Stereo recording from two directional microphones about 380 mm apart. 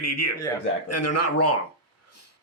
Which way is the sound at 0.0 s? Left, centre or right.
Left.